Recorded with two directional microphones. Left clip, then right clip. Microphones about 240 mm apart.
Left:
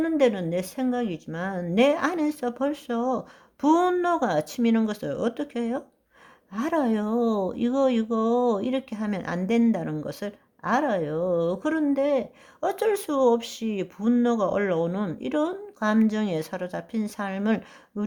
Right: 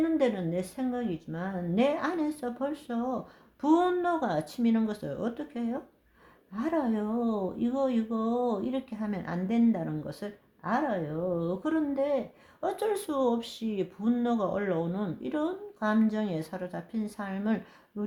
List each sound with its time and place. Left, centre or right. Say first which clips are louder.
0.0 s speech: left 5 dB; left